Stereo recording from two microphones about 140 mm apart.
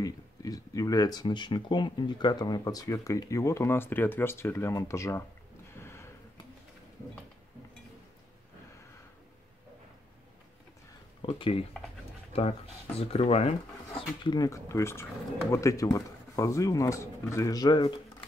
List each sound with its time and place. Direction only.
0.0 s speech: 25° left (ahead or behind)
5.8 s gasp: 20° left (ahead or behind)
11.2 s speech: 40° left (ahead or behind)
14.2 s speech: 30° left (ahead or behind)